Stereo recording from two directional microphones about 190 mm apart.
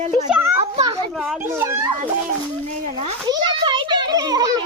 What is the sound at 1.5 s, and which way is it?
Speech, 15° right (ahead or behind).